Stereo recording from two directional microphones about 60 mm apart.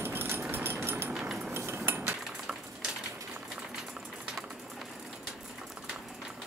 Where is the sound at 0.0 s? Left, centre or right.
Right.